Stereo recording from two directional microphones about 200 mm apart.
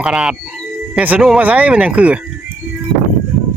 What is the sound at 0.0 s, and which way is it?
Speech, 5° right (ahead or behind).